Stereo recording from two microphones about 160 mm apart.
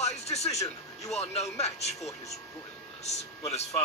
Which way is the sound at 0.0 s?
45° left (ahead or behind).